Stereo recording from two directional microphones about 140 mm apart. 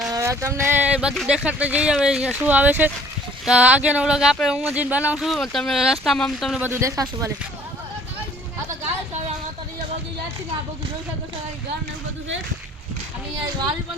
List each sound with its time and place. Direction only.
0.1 s a sound: 20° right (ahead or behind)
1.1 s speech: centre (ahead or behind)
6.6 s speech: 20° right (ahead or behind)